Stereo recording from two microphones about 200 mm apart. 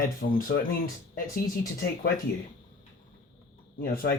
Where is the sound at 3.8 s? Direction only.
45° left (ahead or behind).